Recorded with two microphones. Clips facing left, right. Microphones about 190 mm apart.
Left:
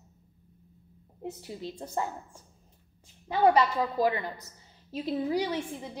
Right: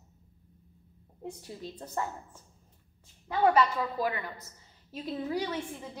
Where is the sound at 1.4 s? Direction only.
10° left (ahead or behind).